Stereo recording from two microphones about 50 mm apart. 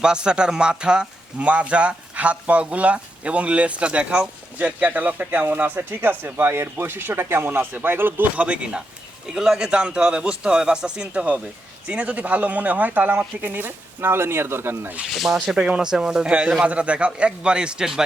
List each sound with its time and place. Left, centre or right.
0.0 s a man's voice: centre; by 6.5 s right
6.5 s speech: right
8.4 s a man's voice: right
9.2 s speech: centre; by 14.9 s right
15.1 s speech: centre
15.5 s speech: centre
16.6 s a man's voice: right